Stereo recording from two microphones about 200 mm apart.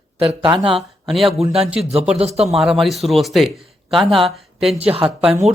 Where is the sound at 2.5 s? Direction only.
Centre (ahead or behind).